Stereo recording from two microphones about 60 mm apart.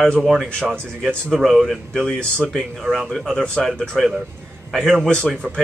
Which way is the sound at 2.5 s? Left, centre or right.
Centre.